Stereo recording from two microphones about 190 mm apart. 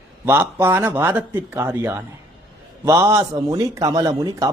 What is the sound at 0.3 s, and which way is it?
A man's voice, 10° right (ahead or behind).